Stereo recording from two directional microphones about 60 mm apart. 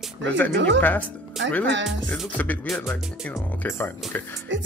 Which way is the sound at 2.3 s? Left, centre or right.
Left.